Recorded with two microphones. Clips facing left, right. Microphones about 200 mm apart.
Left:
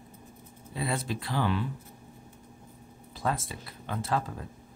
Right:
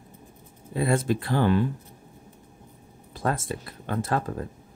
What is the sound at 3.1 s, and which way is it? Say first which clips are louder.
Speech: right 4 dB; 50° right (ahead or behind).